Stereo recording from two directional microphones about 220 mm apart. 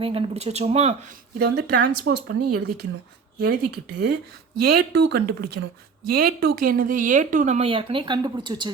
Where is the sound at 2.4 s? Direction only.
90° right.